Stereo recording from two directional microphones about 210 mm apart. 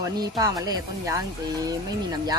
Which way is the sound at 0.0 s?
15° right (ahead or behind).